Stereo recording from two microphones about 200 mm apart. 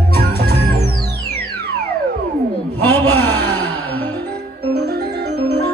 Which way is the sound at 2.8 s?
10° left (ahead or behind).